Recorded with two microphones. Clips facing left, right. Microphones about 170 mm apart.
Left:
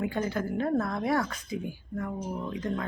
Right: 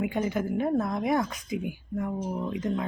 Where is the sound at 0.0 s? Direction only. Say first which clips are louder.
Right 2 dB; 15° right (ahead or behind).